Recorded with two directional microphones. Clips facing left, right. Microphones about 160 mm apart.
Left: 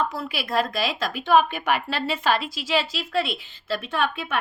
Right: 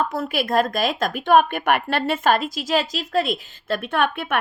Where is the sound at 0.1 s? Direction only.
50° right (ahead or behind).